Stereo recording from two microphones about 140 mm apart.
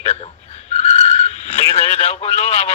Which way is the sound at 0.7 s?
50° left (ahead or behind).